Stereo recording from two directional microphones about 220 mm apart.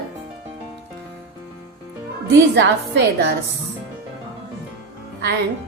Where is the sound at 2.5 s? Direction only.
50° right (ahead or behind).